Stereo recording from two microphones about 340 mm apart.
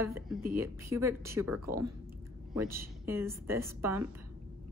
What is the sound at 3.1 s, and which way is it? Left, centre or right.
Speech, centre.